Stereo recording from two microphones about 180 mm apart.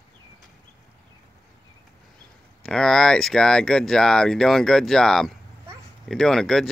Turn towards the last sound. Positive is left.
turn(degrees=0)  # may be behind; listen again after turning